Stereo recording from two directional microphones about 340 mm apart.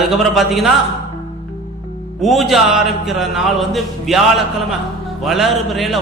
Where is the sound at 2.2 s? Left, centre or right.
Centre.